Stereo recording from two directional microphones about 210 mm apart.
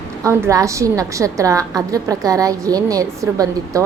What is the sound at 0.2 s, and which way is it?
A woman's voice, 15° right (ahead or behind).